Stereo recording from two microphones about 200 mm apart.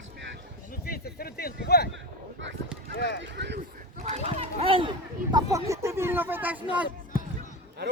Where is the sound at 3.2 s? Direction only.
60° right (ahead or behind).